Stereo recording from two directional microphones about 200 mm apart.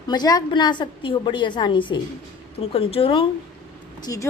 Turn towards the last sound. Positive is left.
turn(degrees=15)  # may be behind; listen again after turning